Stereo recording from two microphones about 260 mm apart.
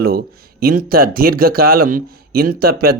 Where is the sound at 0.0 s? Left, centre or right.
Right.